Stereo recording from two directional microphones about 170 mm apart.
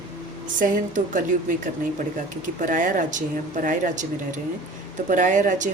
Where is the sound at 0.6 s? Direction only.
50° right (ahead or behind).